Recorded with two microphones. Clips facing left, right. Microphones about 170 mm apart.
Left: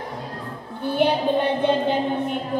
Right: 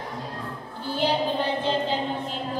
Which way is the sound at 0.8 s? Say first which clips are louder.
Left 5 dB; 60° left (ahead or behind).